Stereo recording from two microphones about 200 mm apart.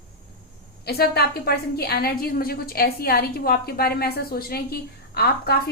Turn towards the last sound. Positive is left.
turn(degrees=50)  # may be behind; listen again after turning